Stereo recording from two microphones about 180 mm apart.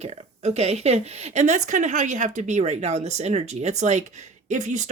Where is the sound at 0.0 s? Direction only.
35° right (ahead or behind).